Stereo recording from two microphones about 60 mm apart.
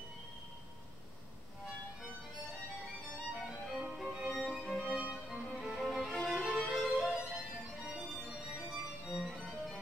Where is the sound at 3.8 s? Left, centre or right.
Centre.